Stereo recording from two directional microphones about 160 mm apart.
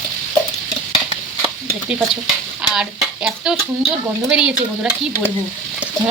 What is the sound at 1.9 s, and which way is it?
Speech, 5° right (ahead or behind).